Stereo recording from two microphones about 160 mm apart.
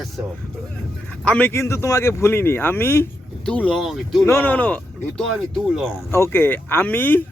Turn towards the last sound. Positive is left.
turn(degrees=10)  # may be behind; listen again after turning